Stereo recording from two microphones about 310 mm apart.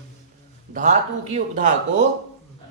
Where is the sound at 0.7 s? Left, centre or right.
Right.